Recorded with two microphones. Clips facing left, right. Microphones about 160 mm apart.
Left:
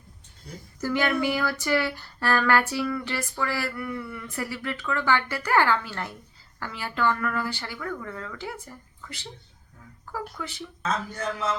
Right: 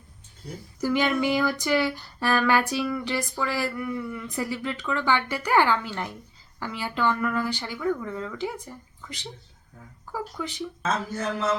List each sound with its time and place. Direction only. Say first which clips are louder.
0.8 s speech: right 1 dB; 15° right (ahead or behind)
10.3 s speech: right 4 dB; 15° right (ahead or behind)